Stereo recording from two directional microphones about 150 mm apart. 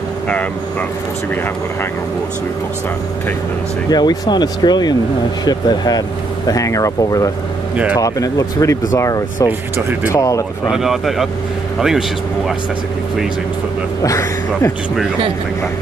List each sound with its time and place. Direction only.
3.9 s speech: 25° left (ahead or behind)
9.5 s speech: 15° right (ahead or behind)
10.1 s speech: 20° left (ahead or behind)
10.7 s speech: centre (ahead or behind)
14.0 s speech: 20° left (ahead or behind)